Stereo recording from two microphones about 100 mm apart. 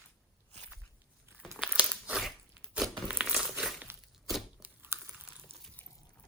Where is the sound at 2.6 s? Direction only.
10° right (ahead or behind).